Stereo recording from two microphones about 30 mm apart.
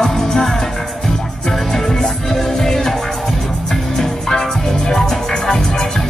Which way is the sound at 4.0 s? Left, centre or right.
Centre.